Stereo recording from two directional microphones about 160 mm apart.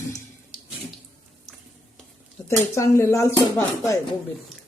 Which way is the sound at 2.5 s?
15° left (ahead or behind).